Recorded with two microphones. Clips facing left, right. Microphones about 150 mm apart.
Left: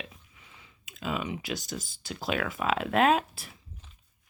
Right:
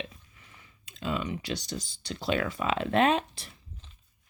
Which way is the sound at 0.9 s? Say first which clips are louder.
Right 1 dB; 5° left (ahead or behind).